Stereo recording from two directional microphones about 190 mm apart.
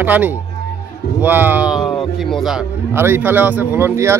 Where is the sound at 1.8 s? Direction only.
25° left (ahead or behind).